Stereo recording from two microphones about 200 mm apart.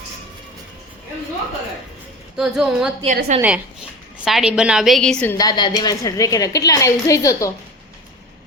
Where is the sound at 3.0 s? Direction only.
35° right (ahead or behind).